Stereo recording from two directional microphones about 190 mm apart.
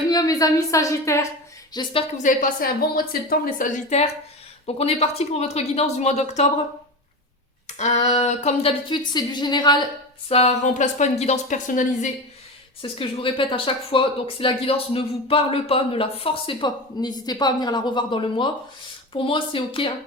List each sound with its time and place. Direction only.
0.1 s speech: 20° left (ahead or behind)
1.7 s speech: 25° left (ahead or behind)
2.1 s a woman's voice: 45° left (ahead or behind)
7.8 s speech: 35° left (ahead or behind)
10.2 s speech: 30° left (ahead or behind)
12.8 s speech: 30° left (ahead or behind)